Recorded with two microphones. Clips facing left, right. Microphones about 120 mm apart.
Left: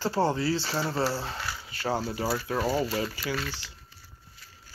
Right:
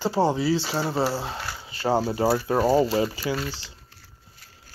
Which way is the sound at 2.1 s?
40° right (ahead or behind).